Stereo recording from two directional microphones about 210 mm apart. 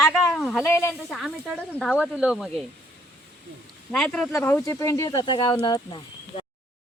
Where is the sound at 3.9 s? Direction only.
5° left (ahead or behind); by 6.4 s 20° left (ahead or behind).